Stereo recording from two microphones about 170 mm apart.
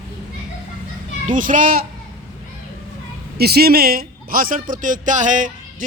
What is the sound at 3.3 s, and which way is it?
A man's voice, 65° right (ahead or behind).